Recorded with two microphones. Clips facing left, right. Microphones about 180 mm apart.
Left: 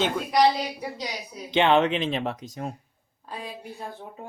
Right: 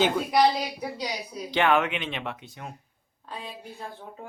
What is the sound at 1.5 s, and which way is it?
Speech, 25° left (ahead or behind).